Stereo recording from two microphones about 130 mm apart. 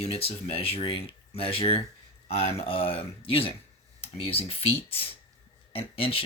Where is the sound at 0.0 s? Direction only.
50° left (ahead or behind).